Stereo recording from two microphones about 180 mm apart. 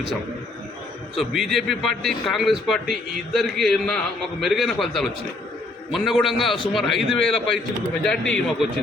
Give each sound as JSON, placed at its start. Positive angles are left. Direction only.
{"t": 1.1, "sound": "a man's voice", "side_deg": 0}